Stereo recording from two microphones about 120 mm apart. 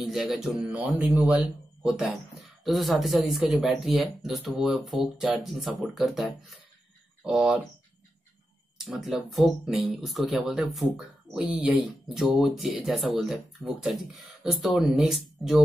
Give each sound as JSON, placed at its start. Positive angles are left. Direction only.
{"t": 0.0, "sound": "a man's voice", "side_deg": 0}
{"t": 8.7, "sound": "a man's voice", "side_deg": -5}